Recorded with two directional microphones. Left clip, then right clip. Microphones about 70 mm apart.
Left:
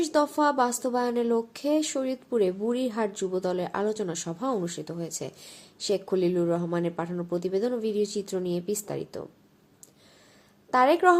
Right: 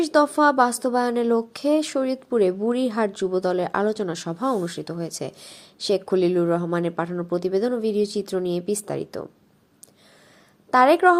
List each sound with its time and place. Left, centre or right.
0.0 s speech: right
10.7 s a woman's voice: right